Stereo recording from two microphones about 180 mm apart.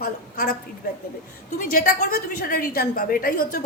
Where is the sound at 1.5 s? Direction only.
50° left (ahead or behind).